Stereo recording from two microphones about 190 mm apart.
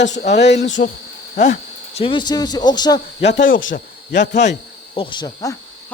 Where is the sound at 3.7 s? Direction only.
55° left (ahead or behind).